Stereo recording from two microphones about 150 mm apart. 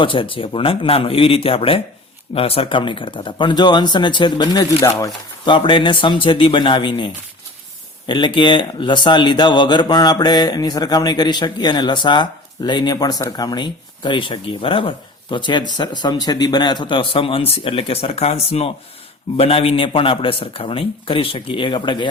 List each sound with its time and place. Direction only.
0.0 s speech: 35° left (ahead or behind)